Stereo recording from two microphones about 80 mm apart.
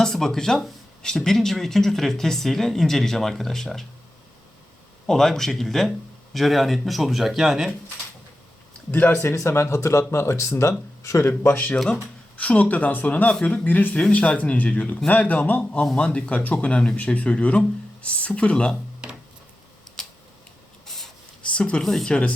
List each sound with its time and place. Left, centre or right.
0.0 s speech: centre
5.0 s speech: centre
8.9 s speech: left
20.8 s spray: centre
21.4 s speech: centre